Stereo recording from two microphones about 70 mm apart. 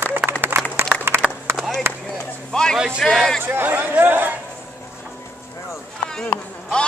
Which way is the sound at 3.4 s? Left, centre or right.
Right.